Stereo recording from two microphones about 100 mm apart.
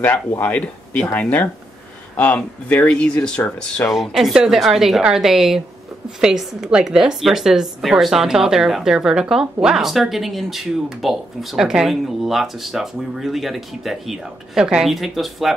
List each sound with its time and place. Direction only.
0.4 s speech: 15° left (ahead or behind)
3.9 s a woman's voice: centre (ahead or behind)